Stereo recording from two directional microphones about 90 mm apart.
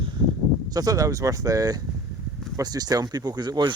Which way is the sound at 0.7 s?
45° right (ahead or behind).